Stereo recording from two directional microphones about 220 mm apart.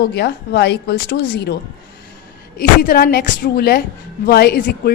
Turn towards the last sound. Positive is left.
turn(degrees=45)  # may be behind; listen again after turning